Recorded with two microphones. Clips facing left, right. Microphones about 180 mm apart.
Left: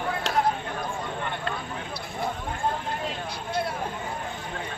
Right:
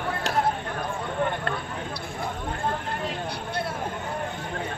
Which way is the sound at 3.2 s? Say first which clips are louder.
Left 1 dB; 60° right (ahead or behind).